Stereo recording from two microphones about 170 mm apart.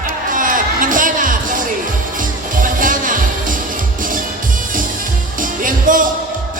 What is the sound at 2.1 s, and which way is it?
Music, 50° right (ahead or behind).